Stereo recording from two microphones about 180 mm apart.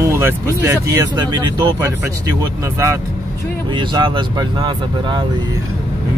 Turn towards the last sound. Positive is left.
turn(degrees=-25)  # may be behind; listen again after turning